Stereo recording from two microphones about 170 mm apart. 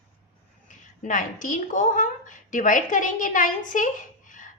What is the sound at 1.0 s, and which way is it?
A woman's voice, 50° left (ahead or behind).